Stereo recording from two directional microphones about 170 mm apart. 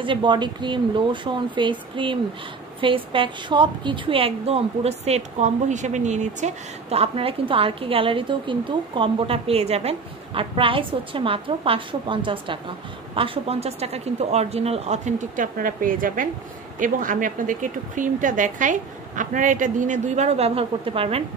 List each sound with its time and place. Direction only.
0.0 s a woman's voice: 30° right (ahead or behind)